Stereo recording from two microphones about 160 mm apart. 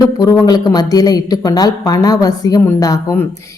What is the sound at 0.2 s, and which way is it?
Speech, 25° left (ahead or behind).